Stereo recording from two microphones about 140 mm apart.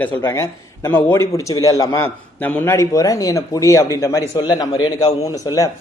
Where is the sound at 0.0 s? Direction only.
20° left (ahead or behind).